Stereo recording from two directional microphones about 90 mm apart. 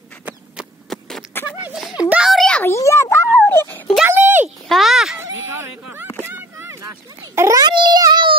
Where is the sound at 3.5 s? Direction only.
25° left (ahead or behind).